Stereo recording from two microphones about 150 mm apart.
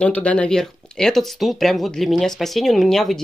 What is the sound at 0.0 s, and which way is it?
Speech, 10° left (ahead or behind).